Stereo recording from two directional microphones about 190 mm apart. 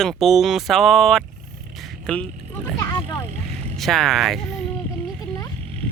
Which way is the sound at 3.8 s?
Centre (ahead or behind).